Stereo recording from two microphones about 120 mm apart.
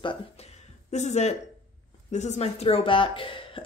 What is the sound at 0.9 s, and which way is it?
A woman's voice, 70° left (ahead or behind).